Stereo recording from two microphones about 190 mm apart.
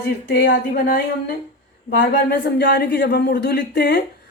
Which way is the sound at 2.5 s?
60° left (ahead or behind).